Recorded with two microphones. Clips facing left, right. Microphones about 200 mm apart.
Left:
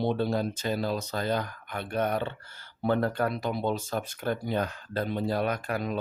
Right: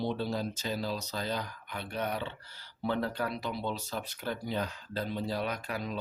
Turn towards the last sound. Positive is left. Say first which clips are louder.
# left 6 dB
turn(degrees=55)  # may be behind; listen again after turning